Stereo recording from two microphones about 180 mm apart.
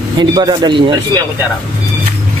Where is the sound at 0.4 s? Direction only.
25° right (ahead or behind).